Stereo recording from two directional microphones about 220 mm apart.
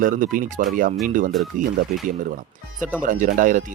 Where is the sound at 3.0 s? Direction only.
35° right (ahead or behind).